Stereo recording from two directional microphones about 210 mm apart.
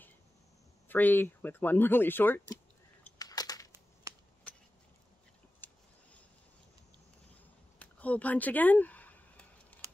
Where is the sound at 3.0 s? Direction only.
15° left (ahead or behind).